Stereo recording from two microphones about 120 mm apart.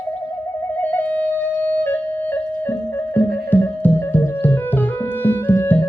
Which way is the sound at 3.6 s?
20° left (ahead or behind).